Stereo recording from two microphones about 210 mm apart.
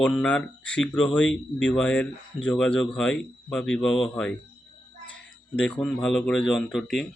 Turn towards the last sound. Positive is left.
turn(degrees=0)  # may be behind; listen again after turning